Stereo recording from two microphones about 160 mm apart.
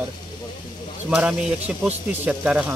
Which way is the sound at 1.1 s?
5° right (ahead or behind).